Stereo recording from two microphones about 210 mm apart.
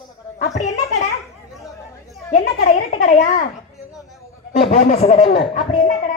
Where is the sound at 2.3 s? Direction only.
30° left (ahead or behind).